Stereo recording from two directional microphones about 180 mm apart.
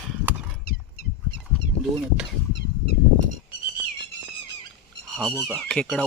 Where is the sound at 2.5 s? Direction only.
75° left (ahead or behind).